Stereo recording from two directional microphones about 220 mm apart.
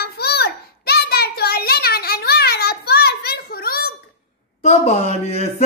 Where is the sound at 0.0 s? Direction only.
45° left (ahead or behind).